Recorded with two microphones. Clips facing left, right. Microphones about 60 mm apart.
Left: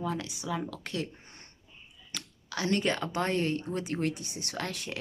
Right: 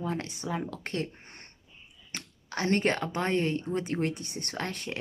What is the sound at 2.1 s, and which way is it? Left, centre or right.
Speech, right.